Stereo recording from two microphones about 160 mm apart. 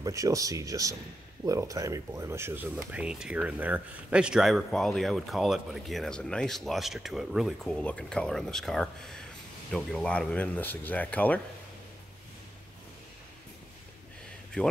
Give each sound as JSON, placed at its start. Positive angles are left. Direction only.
{"t": 0.0, "sound": "speech", "side_deg": -20}